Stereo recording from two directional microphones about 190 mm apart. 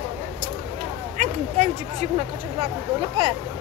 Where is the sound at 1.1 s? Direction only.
40° right (ahead or behind).